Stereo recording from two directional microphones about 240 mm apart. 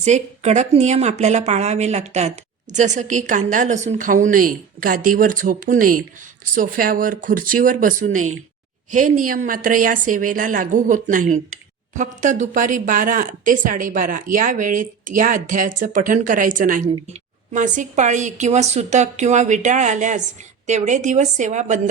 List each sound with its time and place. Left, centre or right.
0.0 s a woman's voice: right
16.8 s a woman's voice: centre
17.5 s a woman's voice: right